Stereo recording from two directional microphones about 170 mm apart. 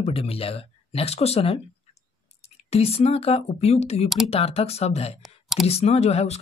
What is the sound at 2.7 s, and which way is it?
Speech, 35° left (ahead or behind).